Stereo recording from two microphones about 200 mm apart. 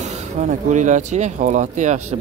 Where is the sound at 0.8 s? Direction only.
35° right (ahead or behind).